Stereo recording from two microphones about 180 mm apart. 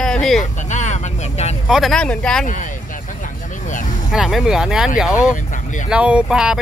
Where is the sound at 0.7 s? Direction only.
40° left (ahead or behind).